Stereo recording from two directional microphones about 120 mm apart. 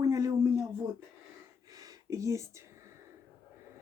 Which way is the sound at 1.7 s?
30° right (ahead or behind).